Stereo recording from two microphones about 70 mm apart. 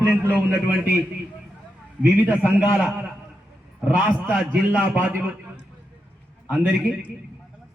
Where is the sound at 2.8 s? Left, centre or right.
Centre.